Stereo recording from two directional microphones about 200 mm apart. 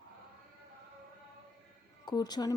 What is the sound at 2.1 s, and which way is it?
Speech, 20° left (ahead or behind).